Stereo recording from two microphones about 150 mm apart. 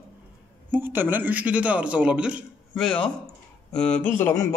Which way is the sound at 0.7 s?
15° right (ahead or behind).